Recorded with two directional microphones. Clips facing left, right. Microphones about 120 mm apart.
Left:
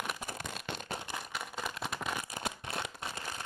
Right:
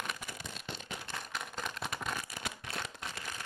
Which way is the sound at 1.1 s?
5° left (ahead or behind).